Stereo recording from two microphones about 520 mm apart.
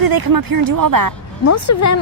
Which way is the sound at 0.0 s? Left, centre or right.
Right.